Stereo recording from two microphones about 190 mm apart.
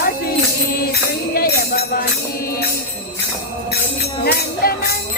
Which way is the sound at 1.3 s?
50° left (ahead or behind).